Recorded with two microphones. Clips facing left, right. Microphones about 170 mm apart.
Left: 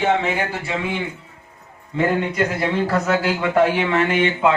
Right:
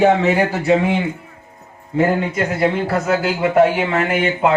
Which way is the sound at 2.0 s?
40° right (ahead or behind).